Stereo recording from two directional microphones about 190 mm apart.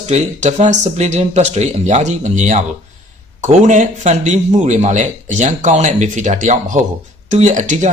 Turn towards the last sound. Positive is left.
turn(degrees=-40)  # may be behind; listen again after turning